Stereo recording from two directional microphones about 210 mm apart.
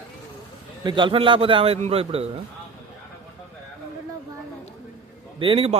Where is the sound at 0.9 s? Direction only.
25° right (ahead or behind).